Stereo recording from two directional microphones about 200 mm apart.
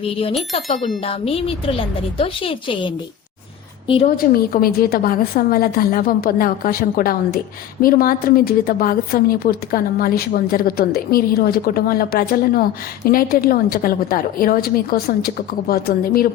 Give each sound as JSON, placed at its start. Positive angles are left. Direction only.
{"t": 0.1, "sound": "a woman's voice", "side_deg": 30}
{"t": 4.0, "sound": "a woman's voice", "side_deg": 50}